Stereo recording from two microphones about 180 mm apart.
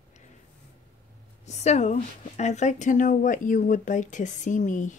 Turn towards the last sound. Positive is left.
turn(degrees=45)  # may be behind; listen again after turning